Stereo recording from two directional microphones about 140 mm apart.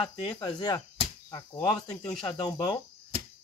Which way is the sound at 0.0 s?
35° left (ahead or behind).